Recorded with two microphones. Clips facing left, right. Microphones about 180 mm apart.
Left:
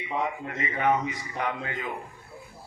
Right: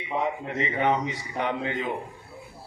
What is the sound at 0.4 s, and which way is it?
A man's voice, 25° right (ahead or behind).